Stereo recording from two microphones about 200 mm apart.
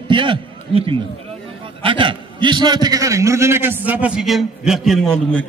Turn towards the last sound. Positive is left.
turn(degrees=5)  # may be behind; listen again after turning